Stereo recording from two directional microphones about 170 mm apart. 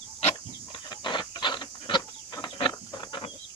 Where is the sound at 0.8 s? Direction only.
25° left (ahead or behind).